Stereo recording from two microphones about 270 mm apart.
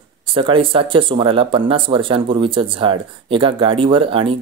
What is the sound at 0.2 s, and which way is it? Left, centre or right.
Speech, centre.